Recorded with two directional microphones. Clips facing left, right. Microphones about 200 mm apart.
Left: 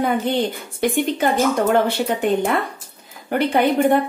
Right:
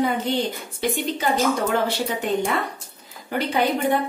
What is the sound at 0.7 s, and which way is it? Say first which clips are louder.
A woman's voice: left 6 dB; 55° left (ahead or behind).